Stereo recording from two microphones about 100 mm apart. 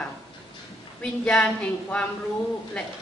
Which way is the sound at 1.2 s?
10° left (ahead or behind).